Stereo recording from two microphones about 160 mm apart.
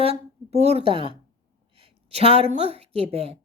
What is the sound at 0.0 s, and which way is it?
A woman's voice, 40° right (ahead or behind).